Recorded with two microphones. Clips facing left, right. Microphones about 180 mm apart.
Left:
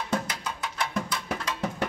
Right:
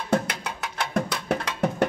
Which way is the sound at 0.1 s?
65° right (ahead or behind).